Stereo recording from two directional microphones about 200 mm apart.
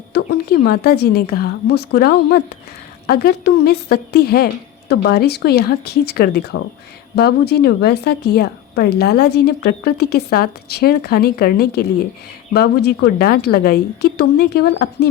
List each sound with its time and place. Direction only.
0.1 s a woman's voice: 55° left (ahead or behind)